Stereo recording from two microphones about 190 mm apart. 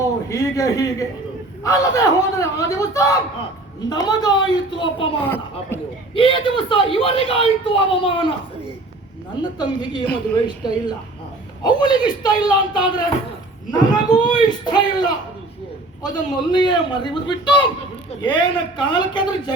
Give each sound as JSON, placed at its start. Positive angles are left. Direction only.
{"t": 0.0, "sound": "a man's voice", "side_deg": 15}
{"t": 5.2, "sound": "speech", "side_deg": 10}
{"t": 6.1, "sound": "speech", "side_deg": 25}
{"t": 9.4, "sound": "speech", "side_deg": 25}
{"t": 16.5, "sound": "speech", "side_deg": 25}